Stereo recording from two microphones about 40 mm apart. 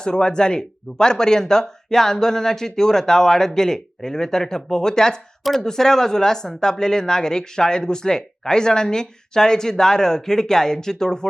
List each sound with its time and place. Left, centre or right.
0.0 s speech: centre